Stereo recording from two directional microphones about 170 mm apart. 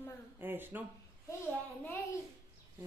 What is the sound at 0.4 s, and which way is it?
Speech, 10° right (ahead or behind).